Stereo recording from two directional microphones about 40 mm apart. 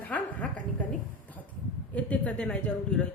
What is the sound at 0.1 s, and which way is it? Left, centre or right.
Speech, left.